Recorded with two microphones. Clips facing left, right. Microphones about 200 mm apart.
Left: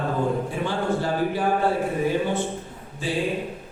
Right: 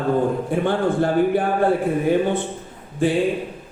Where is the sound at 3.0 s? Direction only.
55° right (ahead or behind).